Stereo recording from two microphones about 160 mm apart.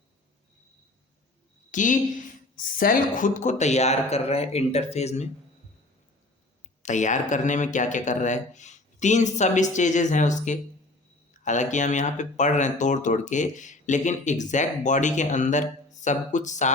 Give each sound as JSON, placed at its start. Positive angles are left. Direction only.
{"t": 1.7, "sound": "speech", "side_deg": 55}
{"t": 6.8, "sound": "speech", "side_deg": 50}